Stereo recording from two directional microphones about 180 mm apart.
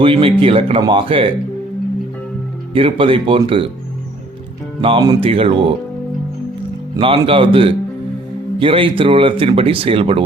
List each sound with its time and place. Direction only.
0.0 s speech: 30° right (ahead or behind)
2.7 s speech: 30° right (ahead or behind)
4.8 s speech: 30° right (ahead or behind)
6.9 s speech: 25° right (ahead or behind)